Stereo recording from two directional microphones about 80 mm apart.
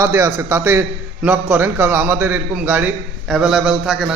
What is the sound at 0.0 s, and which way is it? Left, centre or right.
A man's voice, right.